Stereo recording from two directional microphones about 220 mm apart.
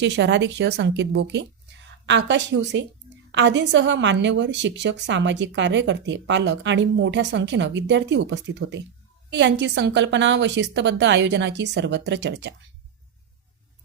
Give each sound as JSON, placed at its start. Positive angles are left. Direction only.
{"t": 0.0, "sound": "a woman's voice", "side_deg": -55}